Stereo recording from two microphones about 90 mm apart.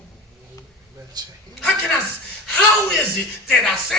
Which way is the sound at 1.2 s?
50° right (ahead or behind).